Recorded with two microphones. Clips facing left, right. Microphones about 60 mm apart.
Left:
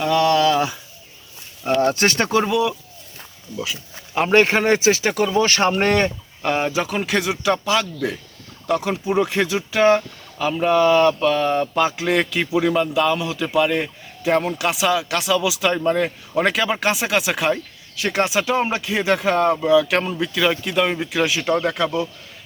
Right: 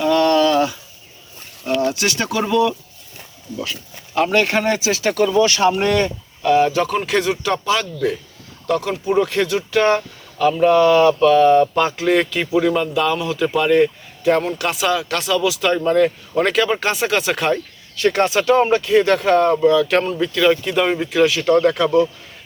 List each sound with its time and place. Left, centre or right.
0.0 s a sound: centre
1.7 s speech: left
2.4 s speech: centre
4.3 s speech: left
5.0 s speech: centre
5.4 s speech: left
6.7 s speech: centre
8.6 s speech: centre